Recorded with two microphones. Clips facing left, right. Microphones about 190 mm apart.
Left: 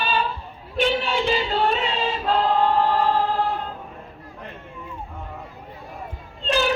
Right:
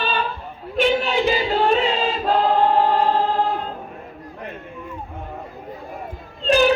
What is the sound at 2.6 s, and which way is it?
Choir, 25° right (ahead or behind).